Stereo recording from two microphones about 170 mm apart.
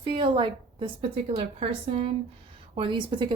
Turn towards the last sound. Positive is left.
turn(degrees=-30)  # may be behind; listen again after turning